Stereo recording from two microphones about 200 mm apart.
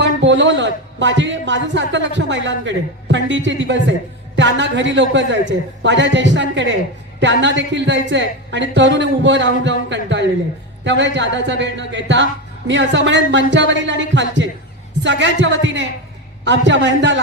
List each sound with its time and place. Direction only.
0.0 s a man's voice: 65° right (ahead or behind)